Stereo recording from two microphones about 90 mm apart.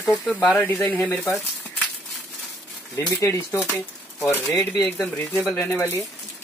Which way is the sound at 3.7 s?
25° left (ahead or behind).